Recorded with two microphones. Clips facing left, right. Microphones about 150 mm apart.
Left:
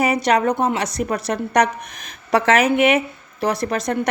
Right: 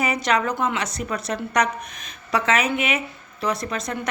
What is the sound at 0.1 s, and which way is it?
Speech, 40° left (ahead or behind).